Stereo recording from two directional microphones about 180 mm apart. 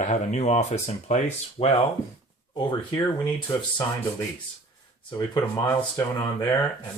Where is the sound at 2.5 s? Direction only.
20° left (ahead or behind).